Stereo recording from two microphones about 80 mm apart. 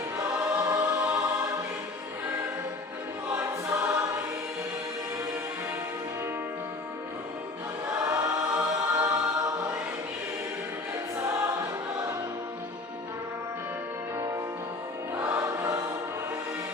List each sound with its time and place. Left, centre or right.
0.2 s choir: right
3.2 s choir: right
7.9 s choir: right
11.2 s choir: right
15.1 s music: right